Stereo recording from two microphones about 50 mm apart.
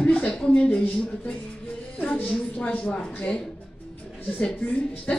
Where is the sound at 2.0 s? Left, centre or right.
Left.